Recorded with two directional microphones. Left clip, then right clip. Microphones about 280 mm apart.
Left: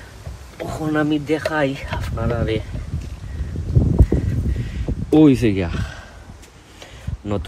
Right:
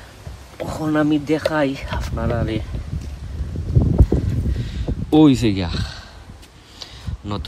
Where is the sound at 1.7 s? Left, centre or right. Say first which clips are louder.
Even; right.